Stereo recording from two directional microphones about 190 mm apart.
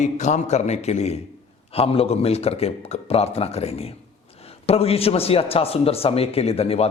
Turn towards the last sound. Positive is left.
turn(degrees=30)  # may be behind; listen again after turning